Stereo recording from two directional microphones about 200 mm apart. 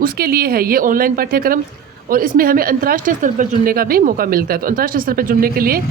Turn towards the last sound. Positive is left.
turn(degrees=-50)  # may be behind; listen again after turning